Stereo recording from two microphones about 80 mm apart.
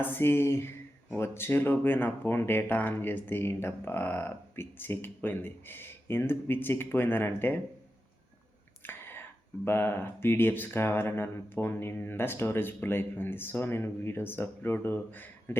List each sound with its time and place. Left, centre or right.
0.0 s speech: left
8.8 s whispering: left
9.6 s speech: left